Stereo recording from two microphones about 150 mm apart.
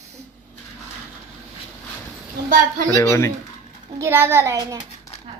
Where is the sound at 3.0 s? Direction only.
15° left (ahead or behind).